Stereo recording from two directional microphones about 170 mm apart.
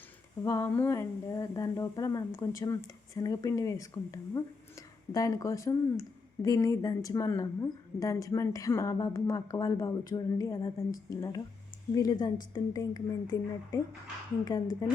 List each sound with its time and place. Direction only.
0.4 s speech: 20° left (ahead or behind)